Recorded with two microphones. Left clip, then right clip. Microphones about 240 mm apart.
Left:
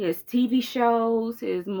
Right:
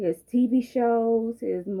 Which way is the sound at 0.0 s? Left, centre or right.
Centre.